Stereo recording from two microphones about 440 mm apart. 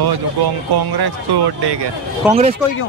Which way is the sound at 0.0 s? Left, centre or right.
Right.